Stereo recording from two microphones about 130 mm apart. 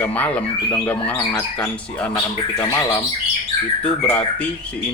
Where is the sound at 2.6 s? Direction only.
20° left (ahead or behind).